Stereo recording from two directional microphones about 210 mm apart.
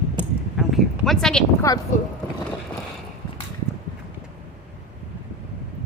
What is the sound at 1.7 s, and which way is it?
Speech, 15° left (ahead or behind).